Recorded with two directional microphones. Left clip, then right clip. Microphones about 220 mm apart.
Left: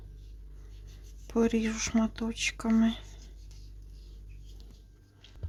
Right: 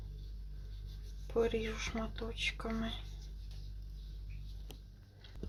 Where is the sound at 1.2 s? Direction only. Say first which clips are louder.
Left 5 dB; 50° left (ahead or behind).